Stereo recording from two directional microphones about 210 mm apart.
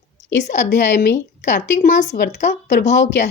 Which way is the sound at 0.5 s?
55° left (ahead or behind).